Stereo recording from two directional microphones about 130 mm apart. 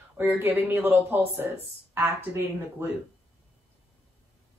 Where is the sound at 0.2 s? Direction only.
15° right (ahead or behind).